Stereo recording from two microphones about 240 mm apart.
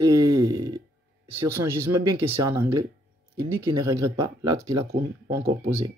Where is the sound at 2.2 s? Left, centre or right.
Centre.